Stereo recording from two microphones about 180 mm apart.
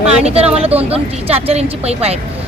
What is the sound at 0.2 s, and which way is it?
Speech, 35° right (ahead or behind).